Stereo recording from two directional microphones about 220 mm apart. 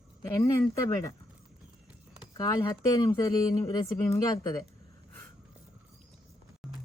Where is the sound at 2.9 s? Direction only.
15° left (ahead or behind).